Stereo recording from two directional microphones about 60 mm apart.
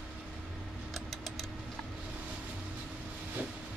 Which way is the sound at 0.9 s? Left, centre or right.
Centre.